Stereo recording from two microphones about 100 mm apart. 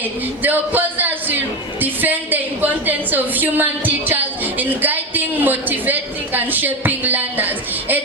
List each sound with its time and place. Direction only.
0.4 s a man's voice: 20° right (ahead or behind)